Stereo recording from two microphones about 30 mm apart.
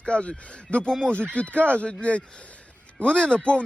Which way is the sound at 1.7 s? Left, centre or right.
Left.